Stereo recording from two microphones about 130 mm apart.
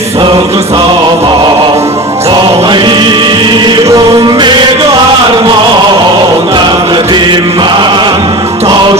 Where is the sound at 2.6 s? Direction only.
35° right (ahead or behind).